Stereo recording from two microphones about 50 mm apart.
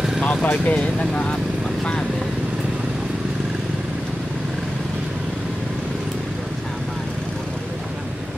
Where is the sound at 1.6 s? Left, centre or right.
Centre.